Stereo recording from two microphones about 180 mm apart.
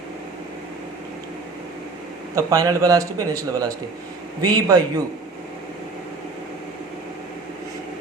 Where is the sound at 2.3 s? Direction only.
20° right (ahead or behind).